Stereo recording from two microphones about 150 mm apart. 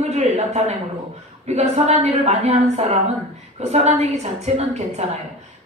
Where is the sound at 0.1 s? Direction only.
50° right (ahead or behind).